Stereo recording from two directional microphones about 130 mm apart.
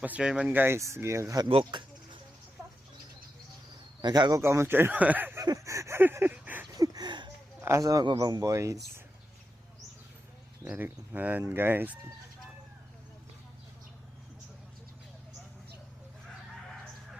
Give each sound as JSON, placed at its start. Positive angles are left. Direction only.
{"t": 0.0, "sound": "speech", "side_deg": -10}
{"t": 1.5, "sound": "speech", "side_deg": -45}
{"t": 4.0, "sound": "speech", "side_deg": -30}
{"t": 5.5, "sound": "a sound", "side_deg": -25}
{"t": 6.7, "sound": "a sound", "side_deg": -30}
{"t": 7.6, "sound": "speech", "side_deg": -25}
{"t": 10.6, "sound": "speech", "side_deg": -15}